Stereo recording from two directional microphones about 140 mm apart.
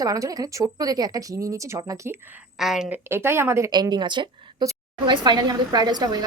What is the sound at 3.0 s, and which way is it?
Speech, 20° right (ahead or behind).